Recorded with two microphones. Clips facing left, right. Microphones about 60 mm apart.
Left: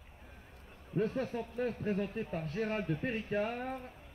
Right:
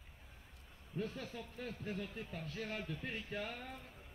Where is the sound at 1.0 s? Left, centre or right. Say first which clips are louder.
Left 10 dB; left.